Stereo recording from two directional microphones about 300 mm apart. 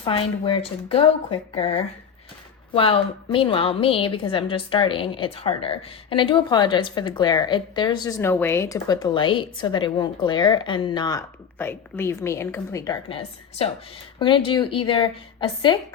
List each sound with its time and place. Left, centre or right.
0.0 s a woman's voice: centre